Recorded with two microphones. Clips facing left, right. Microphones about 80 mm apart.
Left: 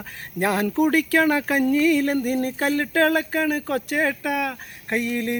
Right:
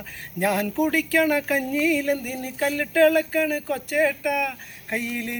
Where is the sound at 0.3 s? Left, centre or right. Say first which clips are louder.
Left 2 dB; left.